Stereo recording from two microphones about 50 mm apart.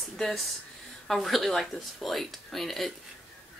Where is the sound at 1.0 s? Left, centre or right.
Centre.